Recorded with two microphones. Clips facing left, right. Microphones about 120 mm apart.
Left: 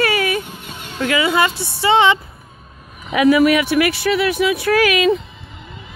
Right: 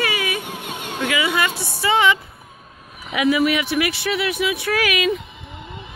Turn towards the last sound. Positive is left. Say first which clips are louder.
# left 6 dB
turn(degrees=35)  # may be behind; listen again after turning